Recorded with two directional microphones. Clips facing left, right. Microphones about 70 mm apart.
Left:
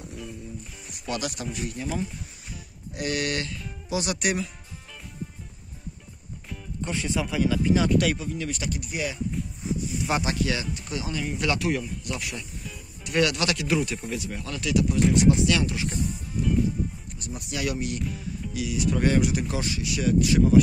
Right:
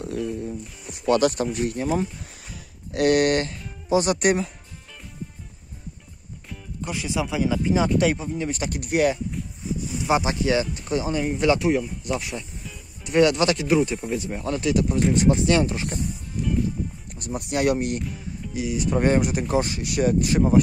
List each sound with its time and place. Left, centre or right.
1.0 s speech: right
3.1 s speech: right
6.5 s speech: centre; by 8.5 s right
8.5 s speech: right
8.7 s speech: right
10.0 s speech: centre; by 16.0 s right
17.2 s speech: right
18.5 s speech: right